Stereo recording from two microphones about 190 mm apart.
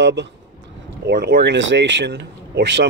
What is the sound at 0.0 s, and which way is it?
Speech, 65° right (ahead or behind).